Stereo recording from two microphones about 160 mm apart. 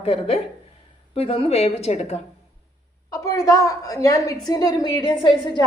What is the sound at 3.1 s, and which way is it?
A woman's voice, 20° left (ahead or behind).